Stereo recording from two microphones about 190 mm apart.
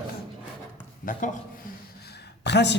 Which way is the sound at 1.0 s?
45° left (ahead or behind).